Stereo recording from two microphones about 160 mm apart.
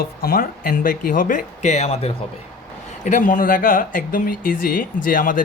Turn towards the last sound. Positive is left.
turn(degrees=55)  # may be behind; listen again after turning